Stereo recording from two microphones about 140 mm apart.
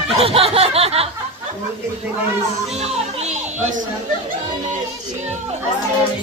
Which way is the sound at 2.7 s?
50° right (ahead or behind).